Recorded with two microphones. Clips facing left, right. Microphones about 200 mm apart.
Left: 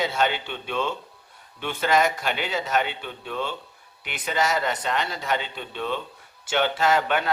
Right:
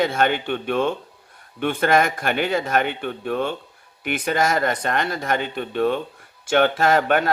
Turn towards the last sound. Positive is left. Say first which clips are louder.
# right 4 dB
turn(degrees=-50)  # may be behind; listen again after turning